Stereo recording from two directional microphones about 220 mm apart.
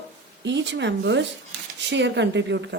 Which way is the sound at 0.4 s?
55° right (ahead or behind).